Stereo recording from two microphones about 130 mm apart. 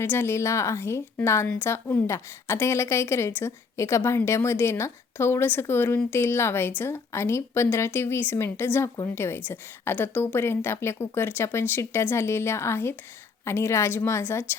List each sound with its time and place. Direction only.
0.0 s a woman's voice: 20° left (ahead or behind)